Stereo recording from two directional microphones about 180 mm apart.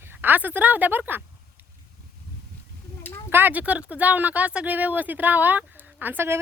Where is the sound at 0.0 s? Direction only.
10° right (ahead or behind).